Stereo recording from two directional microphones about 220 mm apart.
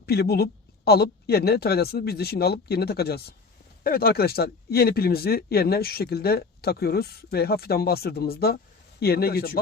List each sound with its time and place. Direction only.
0.0 s speech: 45° left (ahead or behind)